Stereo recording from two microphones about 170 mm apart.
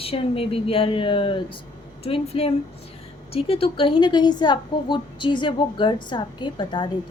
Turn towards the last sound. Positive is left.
turn(degrees=25)  # may be behind; listen again after turning